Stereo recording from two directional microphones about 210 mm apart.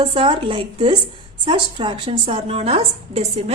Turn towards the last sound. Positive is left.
turn(degrees=-30)  # may be behind; listen again after turning